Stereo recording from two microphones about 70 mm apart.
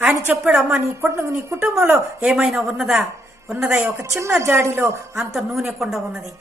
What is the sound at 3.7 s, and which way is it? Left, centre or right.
Speech, right.